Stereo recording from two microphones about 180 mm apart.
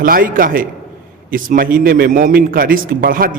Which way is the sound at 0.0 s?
50° right (ahead or behind).